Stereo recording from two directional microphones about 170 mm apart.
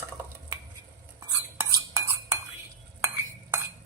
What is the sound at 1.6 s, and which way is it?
Cutlery, 15° right (ahead or behind).